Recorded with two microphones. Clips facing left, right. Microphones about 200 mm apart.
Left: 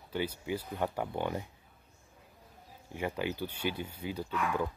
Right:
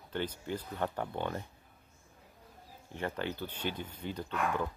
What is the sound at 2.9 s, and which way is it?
Speech, 10° left (ahead or behind).